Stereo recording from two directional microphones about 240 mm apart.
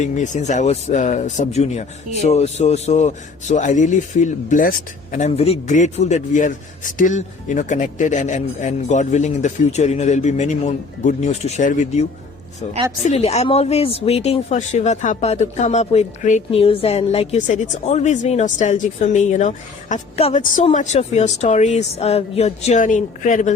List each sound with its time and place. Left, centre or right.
0.0 s speech: left
13.1 s speech: left